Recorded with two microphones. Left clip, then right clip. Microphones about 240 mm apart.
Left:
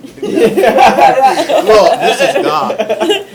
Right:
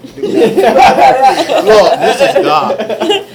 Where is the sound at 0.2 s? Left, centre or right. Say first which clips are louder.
Right 3 dB; centre.